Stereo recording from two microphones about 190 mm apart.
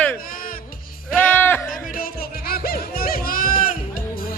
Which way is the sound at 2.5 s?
50° left (ahead or behind).